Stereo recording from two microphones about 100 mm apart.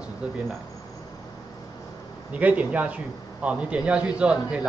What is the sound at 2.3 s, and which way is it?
A man's voice, 15° right (ahead or behind).